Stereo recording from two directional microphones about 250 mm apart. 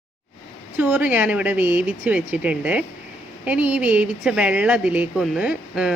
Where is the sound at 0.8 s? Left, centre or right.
Centre.